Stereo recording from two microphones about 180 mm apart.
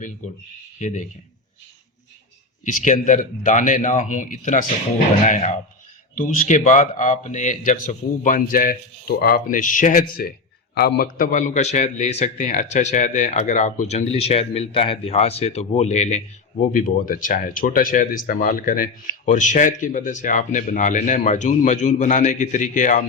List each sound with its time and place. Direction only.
0.2 s a man's voice: 45° left (ahead or behind)
2.6 s a man's voice: 45° left (ahead or behind)